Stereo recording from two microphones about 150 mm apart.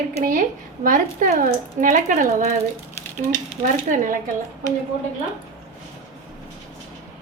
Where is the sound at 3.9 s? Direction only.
60° right (ahead or behind).